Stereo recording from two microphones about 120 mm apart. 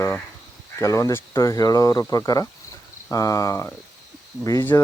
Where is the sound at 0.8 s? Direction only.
25° left (ahead or behind).